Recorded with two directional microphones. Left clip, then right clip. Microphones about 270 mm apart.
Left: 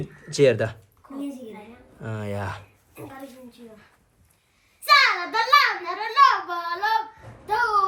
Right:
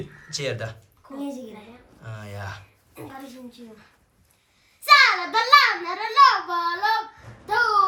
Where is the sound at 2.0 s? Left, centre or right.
Left.